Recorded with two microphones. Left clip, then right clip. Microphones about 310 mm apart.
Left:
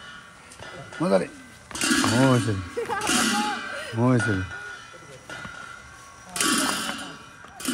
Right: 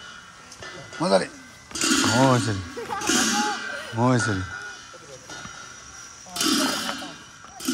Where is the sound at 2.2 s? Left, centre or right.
Centre.